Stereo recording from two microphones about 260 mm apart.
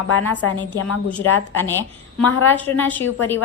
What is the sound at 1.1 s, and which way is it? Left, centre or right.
A woman's voice, centre.